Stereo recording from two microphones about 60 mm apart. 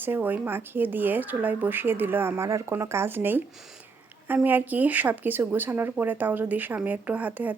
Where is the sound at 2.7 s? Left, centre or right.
Right.